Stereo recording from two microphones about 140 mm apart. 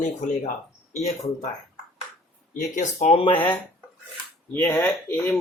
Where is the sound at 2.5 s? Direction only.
60° left (ahead or behind).